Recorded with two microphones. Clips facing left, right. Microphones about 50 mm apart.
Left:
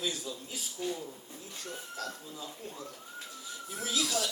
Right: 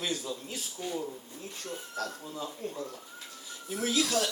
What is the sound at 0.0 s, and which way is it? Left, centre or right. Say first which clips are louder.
Speech: right 2 dB; right.